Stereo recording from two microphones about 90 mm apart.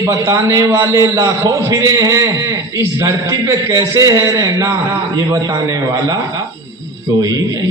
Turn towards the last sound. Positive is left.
turn(degrees=-45)  # may be behind; listen again after turning